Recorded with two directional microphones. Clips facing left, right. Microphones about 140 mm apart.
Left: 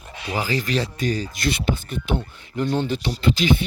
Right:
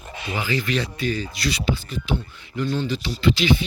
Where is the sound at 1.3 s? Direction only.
50° left (ahead or behind).